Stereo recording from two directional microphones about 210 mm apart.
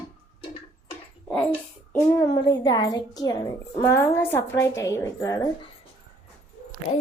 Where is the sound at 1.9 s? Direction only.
10° left (ahead or behind).